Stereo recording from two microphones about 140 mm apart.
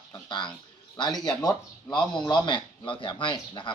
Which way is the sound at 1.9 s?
35° left (ahead or behind).